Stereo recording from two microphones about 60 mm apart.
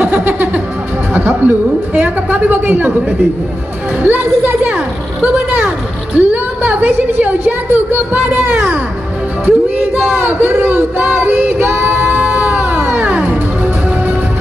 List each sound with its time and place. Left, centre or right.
0.0 s music: right
1.1 s a woman's voice: right
4.0 s a sound: right
6.1 s a woman's voice: right
9.5 s music: right
12.2 s music: right